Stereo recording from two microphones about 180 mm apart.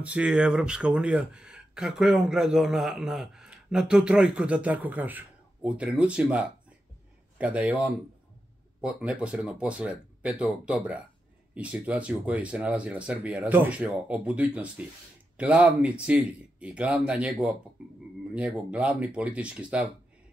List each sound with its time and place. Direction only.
0.0 s speech: 5° right (ahead or behind)